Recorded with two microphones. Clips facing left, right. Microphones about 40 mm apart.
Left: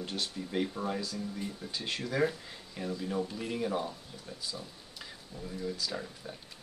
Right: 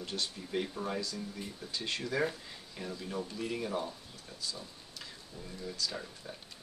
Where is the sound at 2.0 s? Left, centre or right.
Centre.